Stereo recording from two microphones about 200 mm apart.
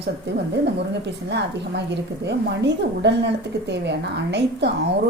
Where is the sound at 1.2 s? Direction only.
60° right (ahead or behind).